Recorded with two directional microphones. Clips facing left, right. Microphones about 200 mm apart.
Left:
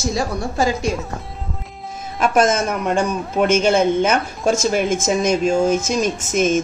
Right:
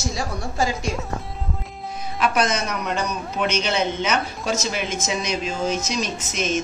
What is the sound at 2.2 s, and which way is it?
A man's voice, 45° left (ahead or behind).